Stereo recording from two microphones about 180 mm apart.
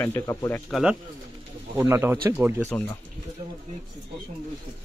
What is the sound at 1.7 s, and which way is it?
Speech, 15° right (ahead or behind).